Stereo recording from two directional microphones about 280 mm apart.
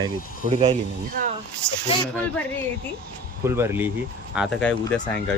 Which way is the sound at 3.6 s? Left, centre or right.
Centre.